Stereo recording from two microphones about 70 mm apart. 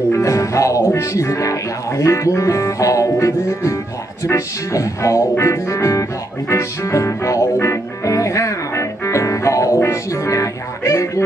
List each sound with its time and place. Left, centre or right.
0.1 s music: left